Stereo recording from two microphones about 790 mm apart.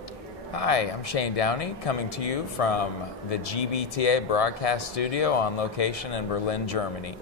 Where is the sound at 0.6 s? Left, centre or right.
Left.